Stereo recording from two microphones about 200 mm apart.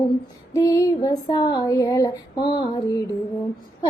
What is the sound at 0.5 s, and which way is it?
Female singing, 15° left (ahead or behind).